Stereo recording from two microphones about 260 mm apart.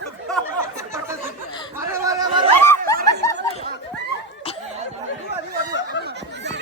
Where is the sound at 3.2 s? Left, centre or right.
Centre.